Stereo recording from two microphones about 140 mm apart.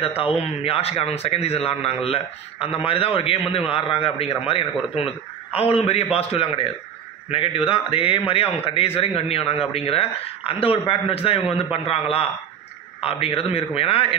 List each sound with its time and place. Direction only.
0.0 s a man's voice: 45° left (ahead or behind)